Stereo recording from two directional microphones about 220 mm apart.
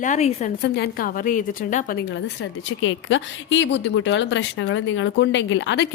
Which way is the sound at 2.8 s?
60° left (ahead or behind).